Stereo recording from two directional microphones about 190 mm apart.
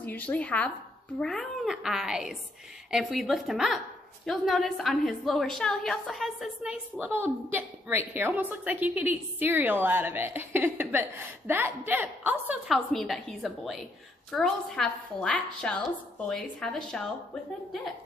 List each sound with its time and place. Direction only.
0.0 s a woman's voice: 10° left (ahead or behind)